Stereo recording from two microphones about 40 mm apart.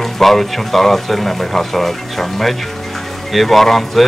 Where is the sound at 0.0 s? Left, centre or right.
Centre.